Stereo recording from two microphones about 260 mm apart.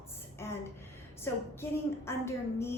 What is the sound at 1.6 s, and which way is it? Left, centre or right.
A woman's voice, centre.